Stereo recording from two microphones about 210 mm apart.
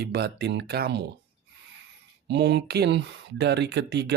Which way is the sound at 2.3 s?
55° right (ahead or behind).